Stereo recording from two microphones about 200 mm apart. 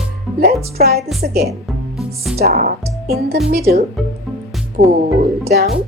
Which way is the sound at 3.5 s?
50° right (ahead or behind).